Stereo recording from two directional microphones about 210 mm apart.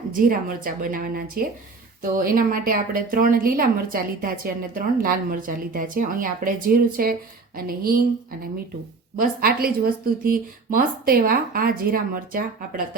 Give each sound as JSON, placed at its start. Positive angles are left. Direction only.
{"t": 0.1, "sound": "a woman's voice", "side_deg": -40}
{"t": 9.1, "sound": "a woman's voice", "side_deg": -45}